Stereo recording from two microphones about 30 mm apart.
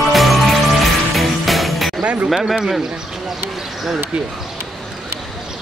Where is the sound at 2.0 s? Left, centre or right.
Right.